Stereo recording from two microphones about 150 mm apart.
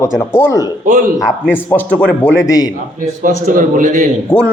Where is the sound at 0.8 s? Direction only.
60° right (ahead or behind).